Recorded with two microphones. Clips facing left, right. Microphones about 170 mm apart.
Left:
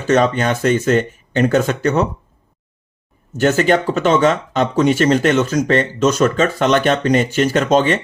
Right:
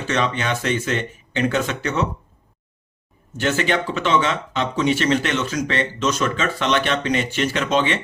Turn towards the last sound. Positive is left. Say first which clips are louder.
# left 6 dB
turn(degrees=45)  # may be behind; listen again after turning